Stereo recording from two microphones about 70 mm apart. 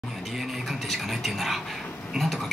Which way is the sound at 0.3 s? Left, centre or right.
Centre.